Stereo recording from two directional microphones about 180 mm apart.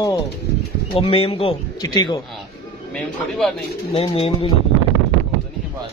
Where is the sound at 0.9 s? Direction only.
30° left (ahead or behind).